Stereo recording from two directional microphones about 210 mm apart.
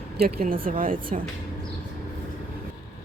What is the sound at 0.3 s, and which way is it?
Speech, 40° right (ahead or behind).